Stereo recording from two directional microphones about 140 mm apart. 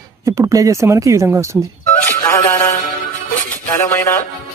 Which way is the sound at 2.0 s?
15° left (ahead or behind).